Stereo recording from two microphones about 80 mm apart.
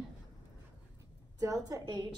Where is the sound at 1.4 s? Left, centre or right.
Right.